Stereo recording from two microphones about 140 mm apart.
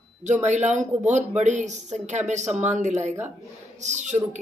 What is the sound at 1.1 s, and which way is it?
Speech, 55° right (ahead or behind).